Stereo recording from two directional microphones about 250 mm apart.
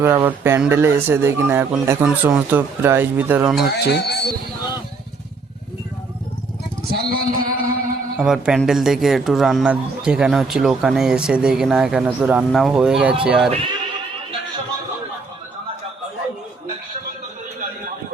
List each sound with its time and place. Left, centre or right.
0.0 s speech: centre
3.7 s a man's voice: left
6.9 s a sound: right
8.2 s a man's voice: centre